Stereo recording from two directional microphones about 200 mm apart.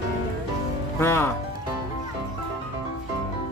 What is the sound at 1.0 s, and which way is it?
Speech, 10° left (ahead or behind).